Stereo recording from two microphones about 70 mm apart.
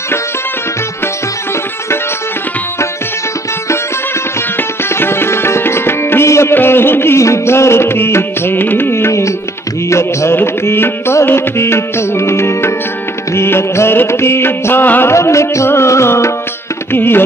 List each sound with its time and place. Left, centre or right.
4.6 s music: left
15.1 s music: left